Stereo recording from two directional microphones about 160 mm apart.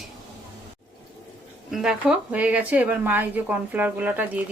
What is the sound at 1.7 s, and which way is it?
A woman's voice, 5° right (ahead or behind).